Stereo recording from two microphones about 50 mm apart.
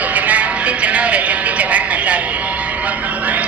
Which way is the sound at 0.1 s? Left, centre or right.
Right.